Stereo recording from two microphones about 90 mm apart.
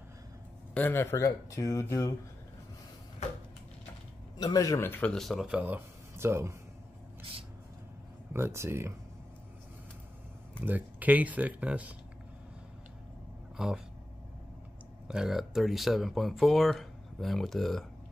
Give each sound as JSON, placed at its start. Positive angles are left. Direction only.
{"t": 0.7, "sound": "speech", "side_deg": 20}
{"t": 1.1, "sound": "speech", "side_deg": 35}
{"t": 4.4, "sound": "speech", "side_deg": 45}
{"t": 4.7, "sound": "speech", "side_deg": 25}
{"t": 5.0, "sound": "speech", "side_deg": 5}
{"t": 5.5, "sound": "speech", "side_deg": -20}
{"t": 5.8, "sound": "a sound", "side_deg": -30}
{"t": 8.3, "sound": "speech", "side_deg": -30}
{"t": 10.6, "sound": "speech", "side_deg": -20}
{"t": 13.6, "sound": "speech", "side_deg": -5}
{"t": 15.0, "sound": "speech", "side_deg": -5}